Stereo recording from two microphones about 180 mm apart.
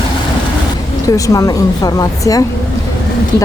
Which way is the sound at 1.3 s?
20° left (ahead or behind).